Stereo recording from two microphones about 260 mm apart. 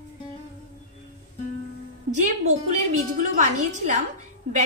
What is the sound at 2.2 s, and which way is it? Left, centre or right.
A woman's voice, right.